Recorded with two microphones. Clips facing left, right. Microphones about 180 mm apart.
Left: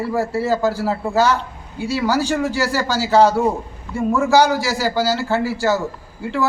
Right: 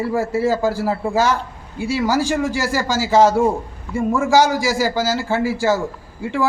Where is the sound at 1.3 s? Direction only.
50° right (ahead or behind).